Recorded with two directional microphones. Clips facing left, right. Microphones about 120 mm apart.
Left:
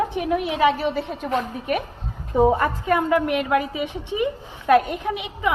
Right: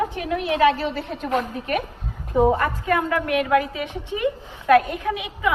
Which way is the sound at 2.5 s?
15° left (ahead or behind).